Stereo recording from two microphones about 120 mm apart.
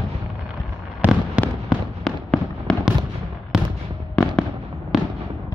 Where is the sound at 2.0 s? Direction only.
Centre (ahead or behind).